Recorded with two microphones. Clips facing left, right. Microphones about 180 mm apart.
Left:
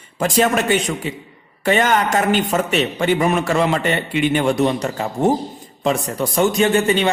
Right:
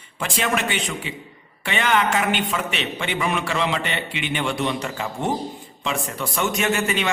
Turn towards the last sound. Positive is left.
turn(degrees=35)  # may be behind; listen again after turning